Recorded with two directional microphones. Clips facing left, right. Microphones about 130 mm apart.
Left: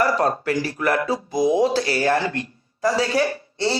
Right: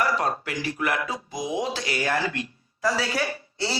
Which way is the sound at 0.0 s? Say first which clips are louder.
Left 5 dB; 40° left (ahead or behind).